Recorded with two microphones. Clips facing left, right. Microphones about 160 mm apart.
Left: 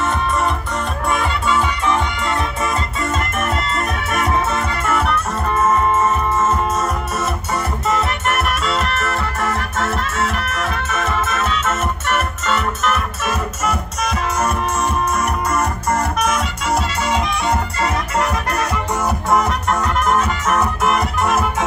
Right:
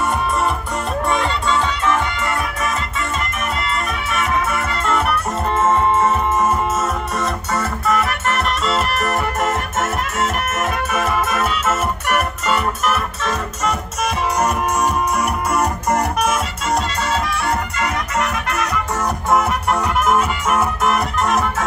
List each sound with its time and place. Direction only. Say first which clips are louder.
1.1 s music: left 2 dB; 10° left (ahead or behind)
4.1 s music: left 1 dB; 35° left (ahead or behind)
4.8 s music: right 1 dB; centre (ahead or behind)
5.5 s music: even; 25° right (ahead or behind)
7.8 s music: right 1 dB; 25° left (ahead or behind)
9.0 s music: right 2 dB; 15° right (ahead or behind)
13.2 s music: even; 10° left (ahead or behind)
14.4 s music: right 2 dB; 15° right (ahead or behind)
17.0 s music: left 1 dB; 15° left (ahead or behind)
17.7 s music: left 2 dB; 30° left (ahead or behind)
19.7 s music: right 1 dB; 10° right (ahead or behind)
20.8 s music: even; centre (ahead or behind)